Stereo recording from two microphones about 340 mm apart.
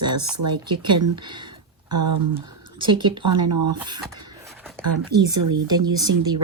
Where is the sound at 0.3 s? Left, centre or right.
Centre.